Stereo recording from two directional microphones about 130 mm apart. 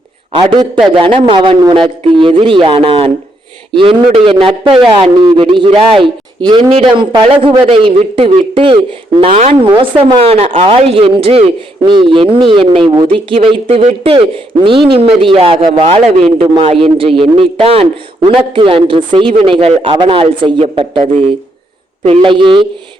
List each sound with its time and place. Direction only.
0.4 s a man's voice: 35° right (ahead or behind)